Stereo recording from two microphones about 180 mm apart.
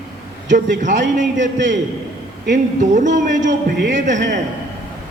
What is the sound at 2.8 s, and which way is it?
Speech, 45° right (ahead or behind).